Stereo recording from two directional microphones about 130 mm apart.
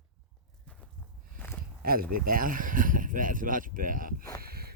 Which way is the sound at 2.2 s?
90° right.